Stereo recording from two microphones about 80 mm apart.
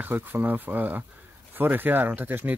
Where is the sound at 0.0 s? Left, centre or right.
Right.